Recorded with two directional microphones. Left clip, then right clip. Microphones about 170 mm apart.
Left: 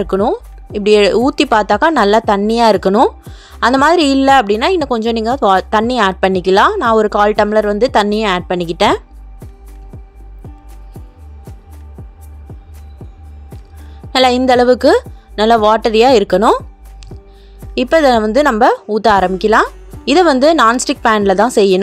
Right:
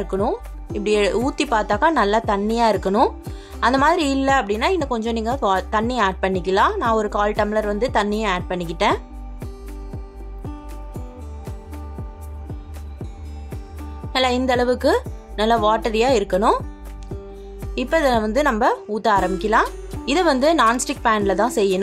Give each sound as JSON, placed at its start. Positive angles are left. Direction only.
{"t": 0.0, "sound": "a woman's voice", "side_deg": 45}
{"t": 14.1, "sound": "a woman's voice", "side_deg": 45}
{"t": 17.7, "sound": "a woman's voice", "side_deg": 45}
{"t": 19.7, "sound": "music", "side_deg": 0}
{"t": 20.1, "sound": "a woman's voice", "side_deg": 45}